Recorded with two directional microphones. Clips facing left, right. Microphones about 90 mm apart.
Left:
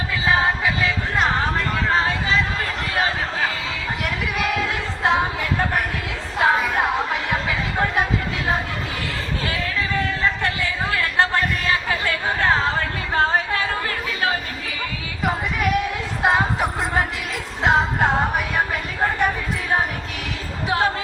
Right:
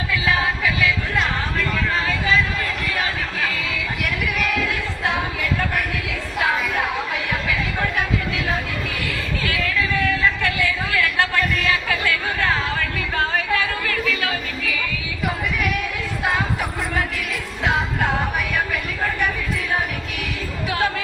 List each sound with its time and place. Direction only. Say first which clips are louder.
0.1 s music: left 2 dB; 30° left (ahead or behind)
2.9 s chatter: left 2 dB; 30° left (ahead or behind)
4.0 s a sound: even; 30° left (ahead or behind)
6.4 s music: left 3 dB; 35° left (ahead or behind)
9.4 s a sound: right 3 dB; 30° left (ahead or behind)
15.3 s music: left 3 dB; 30° left (ahead or behind)
17.6 s speech: left 4 dB; 30° left (ahead or behind)
20.7 s a woman's voice: left 2 dB; 30° left (ahead or behind)